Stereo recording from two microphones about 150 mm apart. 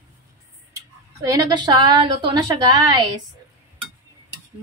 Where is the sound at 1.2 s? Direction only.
20° right (ahead or behind).